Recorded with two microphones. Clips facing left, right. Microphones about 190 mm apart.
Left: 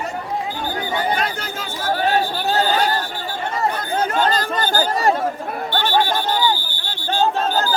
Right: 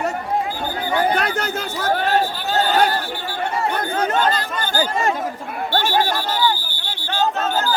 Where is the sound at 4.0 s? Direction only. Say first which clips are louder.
Left 1 dB; 40° left (ahead or behind).